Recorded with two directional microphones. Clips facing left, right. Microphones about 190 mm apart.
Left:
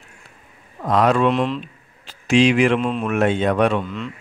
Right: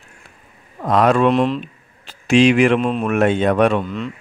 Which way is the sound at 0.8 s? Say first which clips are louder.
Right 2 dB; 55° right (ahead or behind).